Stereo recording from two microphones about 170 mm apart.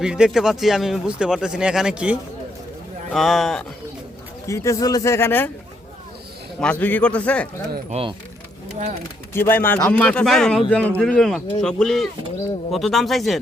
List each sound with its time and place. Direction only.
0.0 s speech: 5° right (ahead or behind)
4.4 s speech: 15° left (ahead or behind)
6.6 s speech: 10° left (ahead or behind)
7.9 s speech: 35° right (ahead or behind)
9.3 s speech: 15° left (ahead or behind)